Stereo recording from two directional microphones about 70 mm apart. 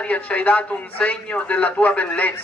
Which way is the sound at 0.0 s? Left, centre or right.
Centre.